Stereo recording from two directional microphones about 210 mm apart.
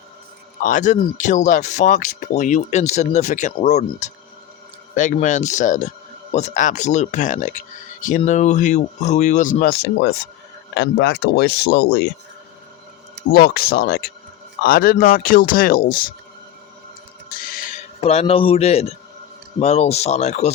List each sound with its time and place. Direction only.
0.6 s speech: 35° left (ahead or behind)
13.3 s speech: 45° left (ahead or behind)
17.3 s music: 45° left (ahead or behind)
18.0 s a man's voice: 30° left (ahead or behind)